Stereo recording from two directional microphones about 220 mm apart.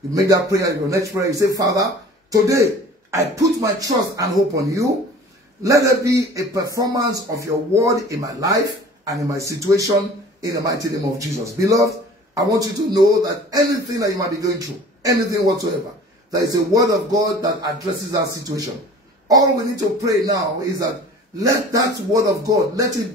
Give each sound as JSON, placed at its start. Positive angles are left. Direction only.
{"t": 0.1, "sound": "a man's voice", "side_deg": -15}
{"t": 19.2, "sound": "a woman's voice", "side_deg": -15}